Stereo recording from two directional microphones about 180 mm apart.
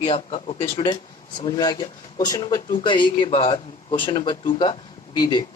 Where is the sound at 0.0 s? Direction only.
30° left (ahead or behind).